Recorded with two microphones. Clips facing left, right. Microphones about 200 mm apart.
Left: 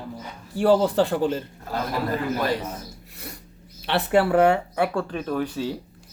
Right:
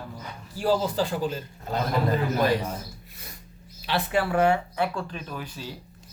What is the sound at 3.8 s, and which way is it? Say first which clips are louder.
Speech: left 5 dB; 65° left (ahead or behind).